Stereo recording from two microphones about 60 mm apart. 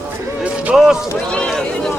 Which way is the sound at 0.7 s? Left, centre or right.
Centre.